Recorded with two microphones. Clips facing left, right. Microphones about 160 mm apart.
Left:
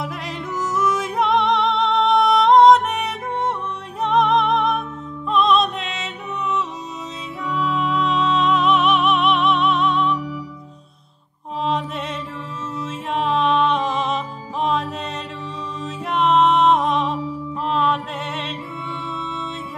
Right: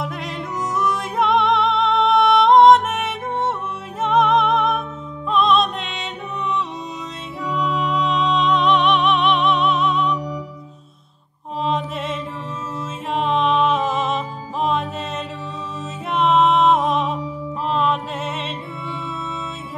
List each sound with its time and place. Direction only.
0.0 s music: centre (ahead or behind)
7.5 s music: centre (ahead or behind)
11.6 s music: centre (ahead or behind)
16.1 s music: centre (ahead or behind)
17.6 s mantra: centre (ahead or behind)